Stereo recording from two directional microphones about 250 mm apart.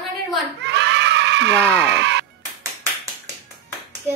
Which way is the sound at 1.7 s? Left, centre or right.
Right.